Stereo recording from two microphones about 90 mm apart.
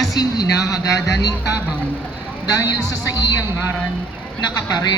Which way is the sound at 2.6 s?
45° left (ahead or behind).